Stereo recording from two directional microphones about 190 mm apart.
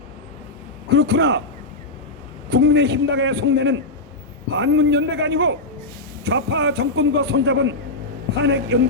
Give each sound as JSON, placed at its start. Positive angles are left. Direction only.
{"t": 0.9, "sound": "a man's voice", "side_deg": -60}
{"t": 2.5, "sound": "a man's voice", "side_deg": -70}